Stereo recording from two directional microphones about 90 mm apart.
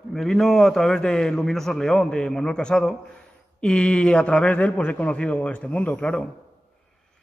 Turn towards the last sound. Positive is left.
turn(degrees=10)  # may be behind; listen again after turning